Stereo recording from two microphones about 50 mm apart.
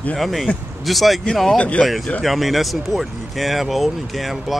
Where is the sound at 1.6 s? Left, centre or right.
Left.